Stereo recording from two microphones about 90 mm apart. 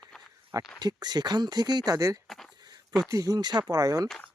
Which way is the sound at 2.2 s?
5° left (ahead or behind).